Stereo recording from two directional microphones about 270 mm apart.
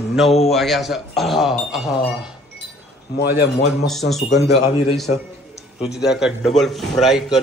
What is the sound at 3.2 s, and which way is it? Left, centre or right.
Speech, left.